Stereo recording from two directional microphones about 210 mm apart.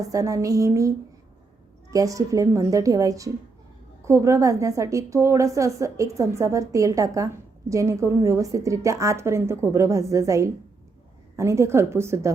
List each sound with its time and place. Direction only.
0.1 s a woman's voice: 15° right (ahead or behind)